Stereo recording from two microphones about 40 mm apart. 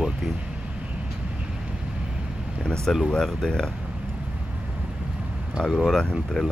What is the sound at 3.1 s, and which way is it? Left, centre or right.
Speech, centre.